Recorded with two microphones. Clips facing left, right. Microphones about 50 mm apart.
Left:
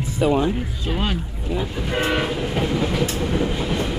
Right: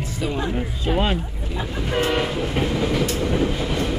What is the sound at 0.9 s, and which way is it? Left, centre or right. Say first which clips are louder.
Speech: right 3 dB; right.